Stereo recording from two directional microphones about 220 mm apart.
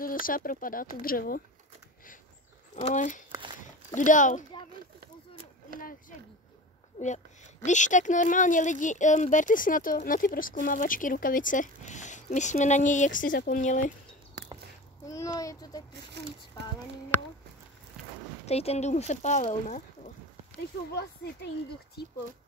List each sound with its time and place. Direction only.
0.0 s speech: 40° left (ahead or behind)
2.7 s speech: 35° left (ahead or behind)
5.8 s speech: 40° left (ahead or behind)
7.6 s speech: 35° left (ahead or behind)
15.0 s a sound: 15° left (ahead or behind)
16.1 s speech: 50° right (ahead or behind)
18.5 s speech: 30° left (ahead or behind)
20.9 s speech: 50° left (ahead or behind)